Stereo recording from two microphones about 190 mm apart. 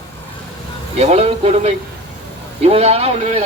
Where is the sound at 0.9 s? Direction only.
35° right (ahead or behind).